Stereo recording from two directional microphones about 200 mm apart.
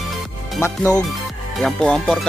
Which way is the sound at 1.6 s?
5° left (ahead or behind).